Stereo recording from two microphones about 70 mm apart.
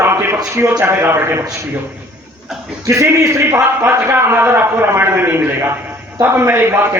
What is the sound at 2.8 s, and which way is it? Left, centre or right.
Speech, right.